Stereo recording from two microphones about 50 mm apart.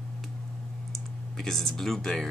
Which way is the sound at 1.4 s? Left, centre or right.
Centre.